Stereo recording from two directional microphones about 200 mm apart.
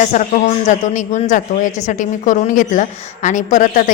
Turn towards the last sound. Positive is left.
turn(degrees=40)  # may be behind; listen again after turning